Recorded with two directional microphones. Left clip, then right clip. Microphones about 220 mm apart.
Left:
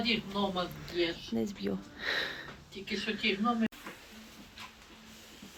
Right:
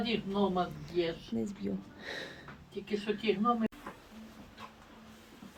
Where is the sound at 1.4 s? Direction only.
Centre (ahead or behind).